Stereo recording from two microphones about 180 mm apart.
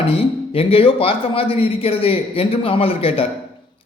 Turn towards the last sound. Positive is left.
turn(degrees=30)  # may be behind; listen again after turning